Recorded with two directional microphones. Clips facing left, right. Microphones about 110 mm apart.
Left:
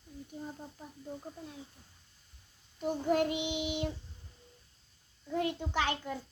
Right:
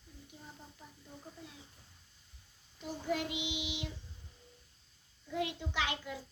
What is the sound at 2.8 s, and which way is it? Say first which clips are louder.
A child's voice: left 7 dB; 50° left (ahead or behind).